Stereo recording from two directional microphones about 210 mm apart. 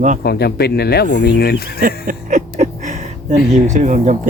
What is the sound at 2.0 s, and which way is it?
Speech, 35° right (ahead or behind).